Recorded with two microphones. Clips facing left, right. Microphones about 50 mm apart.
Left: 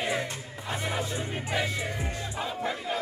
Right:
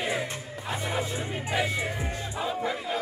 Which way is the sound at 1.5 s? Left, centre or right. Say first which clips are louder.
Right 2 dB; centre.